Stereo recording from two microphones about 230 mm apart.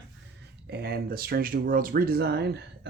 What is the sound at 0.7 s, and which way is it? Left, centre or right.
Speech, right.